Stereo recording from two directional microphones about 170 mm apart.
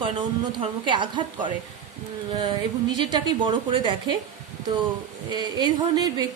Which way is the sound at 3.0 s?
25° right (ahead or behind).